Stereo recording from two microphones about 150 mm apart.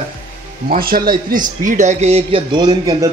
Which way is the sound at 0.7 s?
80° right.